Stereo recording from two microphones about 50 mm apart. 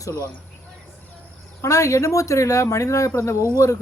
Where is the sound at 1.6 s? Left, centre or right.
Left.